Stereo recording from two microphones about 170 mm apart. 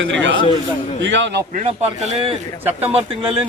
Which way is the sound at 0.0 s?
90° right.